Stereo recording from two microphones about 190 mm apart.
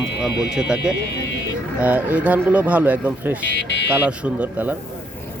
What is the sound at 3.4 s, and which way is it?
Speech, 65° left (ahead or behind).